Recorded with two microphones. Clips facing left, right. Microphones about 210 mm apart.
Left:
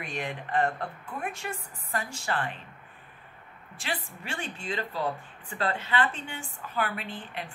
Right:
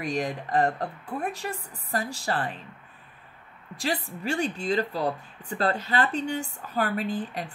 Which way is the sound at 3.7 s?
40° right (ahead or behind).